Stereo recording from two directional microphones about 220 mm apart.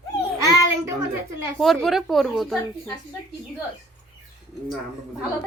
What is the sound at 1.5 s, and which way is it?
Speech, centre (ahead or behind).